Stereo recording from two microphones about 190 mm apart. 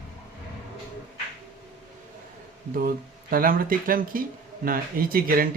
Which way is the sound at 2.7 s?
50° right (ahead or behind).